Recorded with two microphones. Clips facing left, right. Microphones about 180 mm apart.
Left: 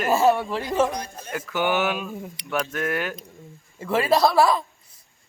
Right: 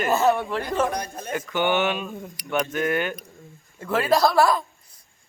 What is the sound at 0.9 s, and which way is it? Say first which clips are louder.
Speech: right 3 dB; 55° right (ahead or behind).